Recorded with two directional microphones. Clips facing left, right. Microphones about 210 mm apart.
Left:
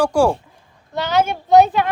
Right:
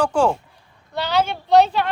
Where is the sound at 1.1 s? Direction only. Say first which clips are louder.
Left 3 dB; 50° left (ahead or behind).